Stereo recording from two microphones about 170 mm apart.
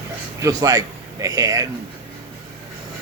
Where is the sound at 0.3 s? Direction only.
20° right (ahead or behind).